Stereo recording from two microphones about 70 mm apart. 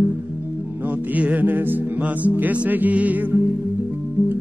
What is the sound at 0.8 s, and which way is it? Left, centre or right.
Music, right.